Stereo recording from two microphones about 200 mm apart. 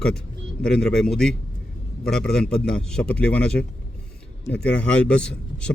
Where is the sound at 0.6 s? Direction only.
50° left (ahead or behind).